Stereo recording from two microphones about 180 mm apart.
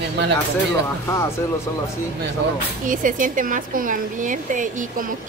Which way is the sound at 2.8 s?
50° right (ahead or behind).